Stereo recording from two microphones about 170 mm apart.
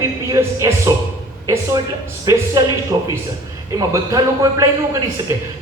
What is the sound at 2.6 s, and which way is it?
Speech, 20° right (ahead or behind).